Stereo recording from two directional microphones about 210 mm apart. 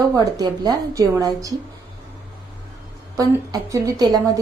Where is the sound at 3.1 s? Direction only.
15° right (ahead or behind).